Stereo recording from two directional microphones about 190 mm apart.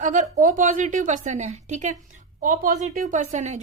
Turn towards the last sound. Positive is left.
turn(degrees=-40)  # may be behind; listen again after turning